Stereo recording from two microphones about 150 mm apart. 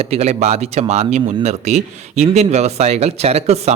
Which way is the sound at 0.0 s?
45° right (ahead or behind).